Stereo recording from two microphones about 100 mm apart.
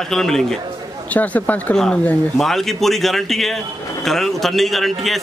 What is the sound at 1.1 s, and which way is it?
Speech, 15° left (ahead or behind).